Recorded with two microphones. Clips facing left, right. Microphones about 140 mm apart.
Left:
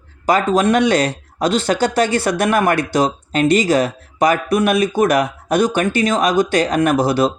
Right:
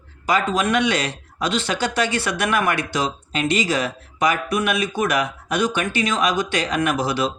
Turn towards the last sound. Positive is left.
turn(degrees=45)  # may be behind; listen again after turning